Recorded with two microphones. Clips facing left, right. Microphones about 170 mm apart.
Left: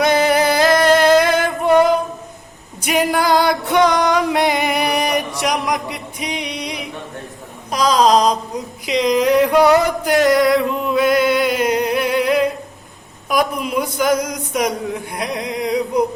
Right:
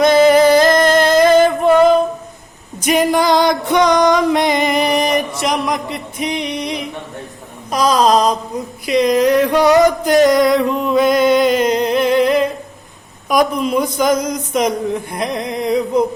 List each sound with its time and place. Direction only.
0.0 s singing: 10° left (ahead or behind)
2.8 s music: 10° left (ahead or behind)
7.7 s mantra: 15° left (ahead or behind)
9.3 s music: 10° left (ahead or behind)
13.2 s a sound: 5° left (ahead or behind)